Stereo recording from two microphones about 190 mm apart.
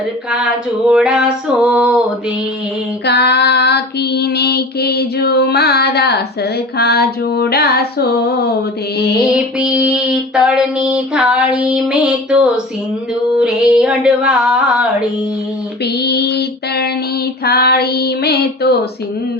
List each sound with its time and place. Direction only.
0.9 s female singing: 5° right (ahead or behind)
3.1 s female singing: 60° left (ahead or behind)
9.1 s female singing: 5° right (ahead or behind)
15.8 s music: 60° left (ahead or behind)
17.4 s female singing: 55° left (ahead or behind)